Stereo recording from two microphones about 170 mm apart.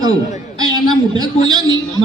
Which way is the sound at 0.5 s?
25° right (ahead or behind).